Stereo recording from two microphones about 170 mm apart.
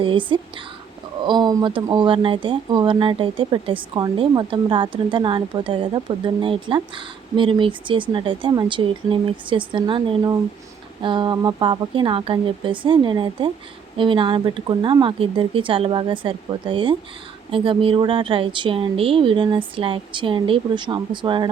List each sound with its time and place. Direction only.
0.0 s a woman's voice: 30° right (ahead or behind)